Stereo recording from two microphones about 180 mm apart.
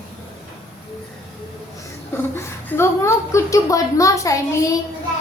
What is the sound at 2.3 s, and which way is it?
Child singing, 10° left (ahead or behind).